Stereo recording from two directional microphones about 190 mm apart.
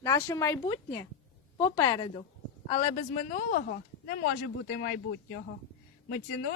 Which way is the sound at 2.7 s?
30° left (ahead or behind).